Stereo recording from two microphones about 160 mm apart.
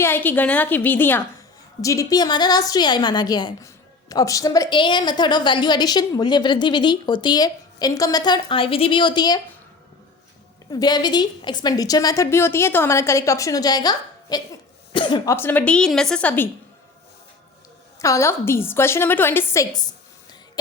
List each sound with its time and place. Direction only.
0.0 s a woman's voice: 10° left (ahead or behind)
10.7 s a woman's voice: 25° left (ahead or behind)
15.4 s a woman's voice: 10° left (ahead or behind)
18.0 s a woman's voice: 20° left (ahead or behind)